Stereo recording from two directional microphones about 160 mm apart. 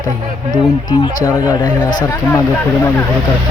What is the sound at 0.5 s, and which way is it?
Speech, 25° left (ahead or behind).